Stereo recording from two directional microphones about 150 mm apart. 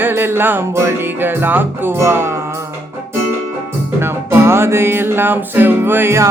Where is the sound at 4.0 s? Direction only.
15° right (ahead or behind).